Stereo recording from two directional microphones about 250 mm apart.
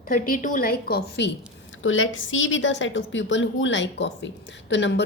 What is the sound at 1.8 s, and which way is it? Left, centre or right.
A woman's voice, left.